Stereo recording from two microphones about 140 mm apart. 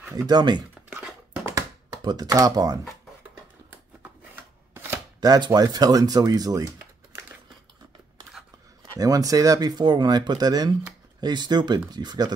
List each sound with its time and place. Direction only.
0.1 s speech: 30° right (ahead or behind)
1.5 s computer keyboard: 30° right (ahead or behind)
4.7 s speech: 25° right (ahead or behind)
8.9 s speech: 25° right (ahead or behind)